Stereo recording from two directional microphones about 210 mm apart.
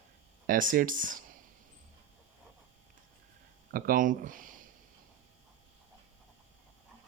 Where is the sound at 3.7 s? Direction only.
40° right (ahead or behind).